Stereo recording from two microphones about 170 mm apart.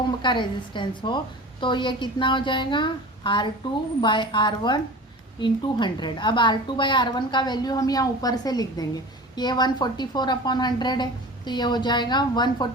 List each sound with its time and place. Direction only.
0.2 s a woman's voice: 30° left (ahead or behind)